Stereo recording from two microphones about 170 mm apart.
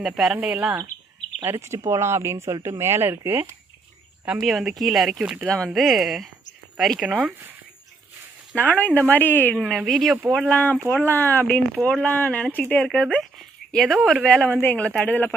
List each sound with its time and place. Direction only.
0.0 s speech: 5° right (ahead or behind)
4.3 s speech: centre (ahead or behind)
8.5 s speech: 10° left (ahead or behind)
9.6 s speech: centre (ahead or behind)